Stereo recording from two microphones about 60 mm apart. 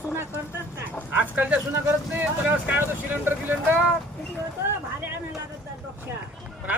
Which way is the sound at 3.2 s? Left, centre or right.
Right.